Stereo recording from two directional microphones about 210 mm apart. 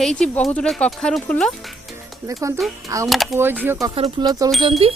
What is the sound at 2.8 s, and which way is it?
Speech, 15° right (ahead or behind).